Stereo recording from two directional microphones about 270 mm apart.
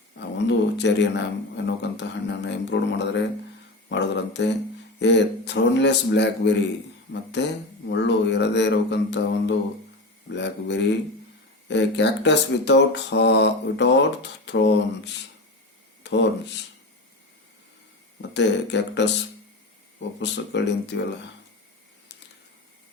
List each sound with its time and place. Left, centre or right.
0.2 s speech: left
18.2 s speech: left
20.1 s speech: left